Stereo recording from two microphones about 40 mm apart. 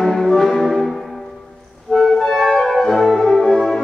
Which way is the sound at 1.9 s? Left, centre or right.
Centre.